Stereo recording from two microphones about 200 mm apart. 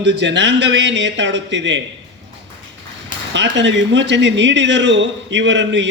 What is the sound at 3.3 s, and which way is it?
Speech, 60° right (ahead or behind).